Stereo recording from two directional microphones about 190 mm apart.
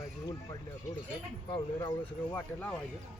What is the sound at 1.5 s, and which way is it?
Speech, 25° left (ahead or behind).